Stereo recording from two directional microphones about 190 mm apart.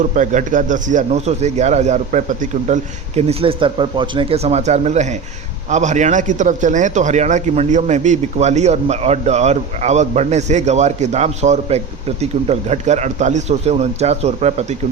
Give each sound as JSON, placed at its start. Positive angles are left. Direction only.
{"t": 0.0, "sound": "a man's voice", "side_deg": -40}